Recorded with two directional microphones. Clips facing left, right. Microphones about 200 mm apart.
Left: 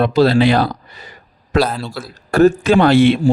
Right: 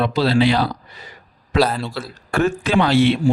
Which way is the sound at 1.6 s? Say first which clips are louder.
Even; centre (ahead or behind).